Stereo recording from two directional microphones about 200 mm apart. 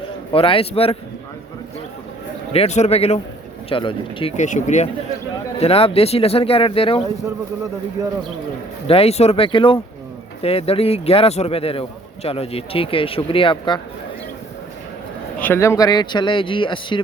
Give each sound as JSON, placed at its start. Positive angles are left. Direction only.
{"t": 0.3, "sound": "a man's voice", "side_deg": 25}
{"t": 2.5, "sound": "a man's voice", "side_deg": 30}
{"t": 8.0, "sound": "speech", "side_deg": -15}
{"t": 8.9, "sound": "a man's voice", "side_deg": 30}
{"t": 15.4, "sound": "a man's voice", "side_deg": 10}